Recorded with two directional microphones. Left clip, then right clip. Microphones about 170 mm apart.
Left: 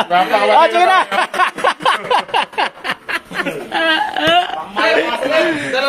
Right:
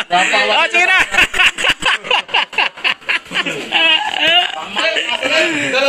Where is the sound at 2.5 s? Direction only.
25° left (ahead or behind).